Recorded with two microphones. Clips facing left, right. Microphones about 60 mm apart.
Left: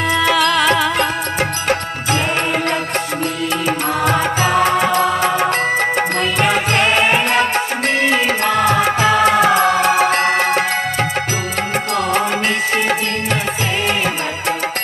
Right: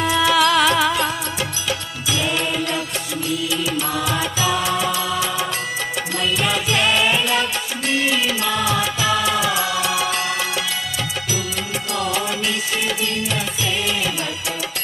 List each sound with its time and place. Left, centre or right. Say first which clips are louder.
0.0 s music: left 2 dB; left
0.4 s music: left 1 dB; centre
4.0 s music: left 8 dB; left